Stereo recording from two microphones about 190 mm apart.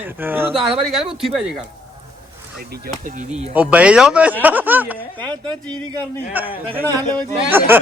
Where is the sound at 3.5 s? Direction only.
10° right (ahead or behind).